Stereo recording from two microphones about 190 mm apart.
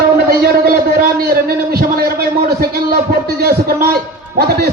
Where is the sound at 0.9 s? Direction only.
50° right (ahead or behind).